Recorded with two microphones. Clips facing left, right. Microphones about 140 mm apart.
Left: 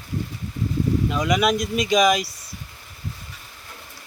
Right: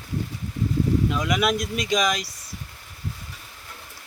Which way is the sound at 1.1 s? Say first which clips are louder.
Left 3 dB; centre (ahead or behind).